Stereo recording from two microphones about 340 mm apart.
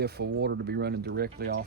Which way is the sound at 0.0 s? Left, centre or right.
Right.